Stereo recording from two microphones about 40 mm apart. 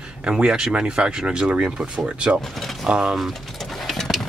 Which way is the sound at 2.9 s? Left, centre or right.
Centre.